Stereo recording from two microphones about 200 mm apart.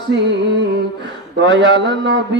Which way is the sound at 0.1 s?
60° right (ahead or behind).